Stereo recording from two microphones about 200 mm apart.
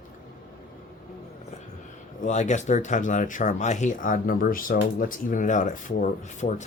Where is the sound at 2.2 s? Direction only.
35° left (ahead or behind).